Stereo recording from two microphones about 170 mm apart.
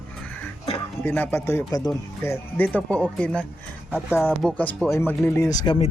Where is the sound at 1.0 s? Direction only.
10° left (ahead or behind); by 5.8 s 25° left (ahead or behind).